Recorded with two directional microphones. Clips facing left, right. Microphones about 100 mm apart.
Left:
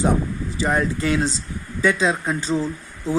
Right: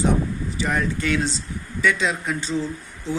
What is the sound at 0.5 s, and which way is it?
Speech, 35° left (ahead or behind).